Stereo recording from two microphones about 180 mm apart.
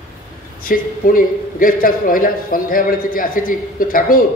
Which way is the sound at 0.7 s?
50° left (ahead or behind).